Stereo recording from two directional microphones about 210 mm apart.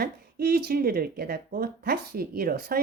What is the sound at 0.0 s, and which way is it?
A woman's voice, 45° right (ahead or behind).